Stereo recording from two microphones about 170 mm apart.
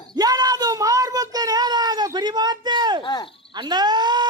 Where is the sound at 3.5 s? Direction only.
25° right (ahead or behind).